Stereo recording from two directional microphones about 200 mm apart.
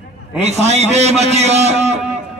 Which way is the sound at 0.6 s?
35° right (ahead or behind).